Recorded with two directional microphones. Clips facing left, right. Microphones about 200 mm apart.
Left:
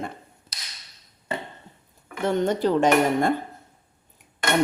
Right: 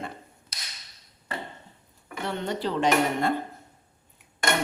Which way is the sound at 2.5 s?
45° left (ahead or behind).